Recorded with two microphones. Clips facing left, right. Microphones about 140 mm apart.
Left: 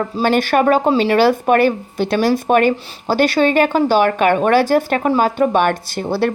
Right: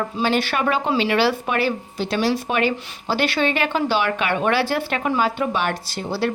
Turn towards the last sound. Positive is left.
turn(degrees=55)  # may be behind; listen again after turning